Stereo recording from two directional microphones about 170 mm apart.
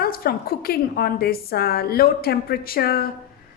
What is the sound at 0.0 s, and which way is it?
Speech, 60° left (ahead or behind).